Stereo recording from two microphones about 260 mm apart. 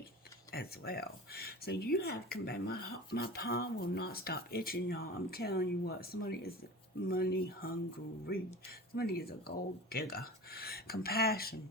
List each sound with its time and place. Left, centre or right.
0.5 s speech: left
9.0 s speech: left